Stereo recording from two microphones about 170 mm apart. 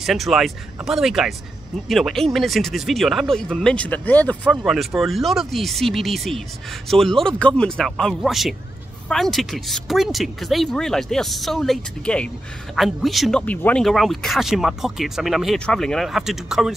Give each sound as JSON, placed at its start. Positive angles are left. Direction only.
{"t": 0.0, "sound": "speech", "side_deg": 0}